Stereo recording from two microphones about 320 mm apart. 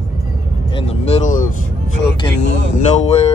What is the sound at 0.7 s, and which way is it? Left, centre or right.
Speech, centre.